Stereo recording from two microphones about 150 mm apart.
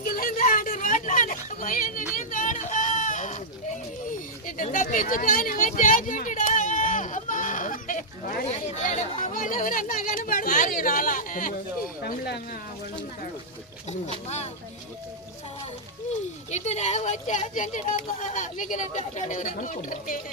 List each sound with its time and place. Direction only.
0.0 s a sound: 70° left (ahead or behind)
4.1 s speech: 60° left (ahead or behind)
12.0 s speech: 85° left
14.3 s speech: 45° left (ahead or behind)
16.5 s speech: 50° left (ahead or behind)